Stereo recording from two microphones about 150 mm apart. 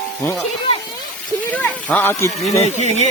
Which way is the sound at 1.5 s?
10° left (ahead or behind).